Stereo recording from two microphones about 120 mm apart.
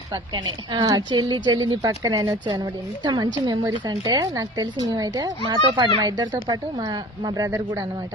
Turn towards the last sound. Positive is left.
turn(degrees=-30)  # may be behind; listen again after turning